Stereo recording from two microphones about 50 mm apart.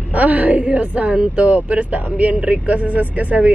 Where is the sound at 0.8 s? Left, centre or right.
Right.